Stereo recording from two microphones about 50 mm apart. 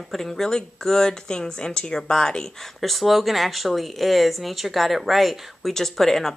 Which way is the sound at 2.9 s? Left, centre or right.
Centre.